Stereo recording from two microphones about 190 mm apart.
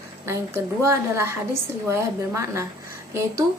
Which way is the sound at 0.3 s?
15° right (ahead or behind).